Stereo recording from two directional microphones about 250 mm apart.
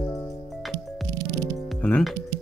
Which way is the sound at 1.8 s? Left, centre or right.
Centre.